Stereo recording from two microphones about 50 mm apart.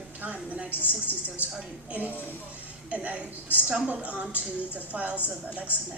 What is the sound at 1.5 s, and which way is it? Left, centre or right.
A woman's voice, right.